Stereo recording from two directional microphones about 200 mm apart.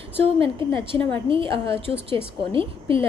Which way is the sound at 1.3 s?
25° right (ahead or behind).